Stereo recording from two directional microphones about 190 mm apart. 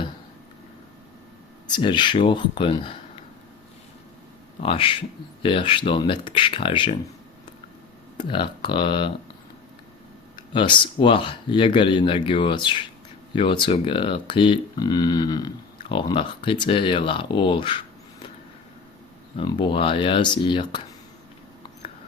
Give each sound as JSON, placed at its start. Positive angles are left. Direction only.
{"t": 1.6, "sound": "speech", "side_deg": 25}
{"t": 4.6, "sound": "speech", "side_deg": 30}
{"t": 8.2, "sound": "speech", "side_deg": 25}
{"t": 10.5, "sound": "speech", "side_deg": 25}
{"t": 19.4, "sound": "speech", "side_deg": 25}